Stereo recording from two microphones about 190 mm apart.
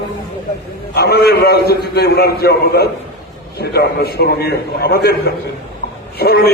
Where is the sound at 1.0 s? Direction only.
60° left (ahead or behind).